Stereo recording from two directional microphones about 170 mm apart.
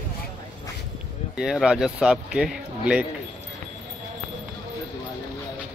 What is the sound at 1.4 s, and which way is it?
A man's voice, 5° right (ahead or behind).